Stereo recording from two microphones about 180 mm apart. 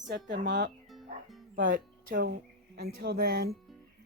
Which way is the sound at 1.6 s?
50° right (ahead or behind).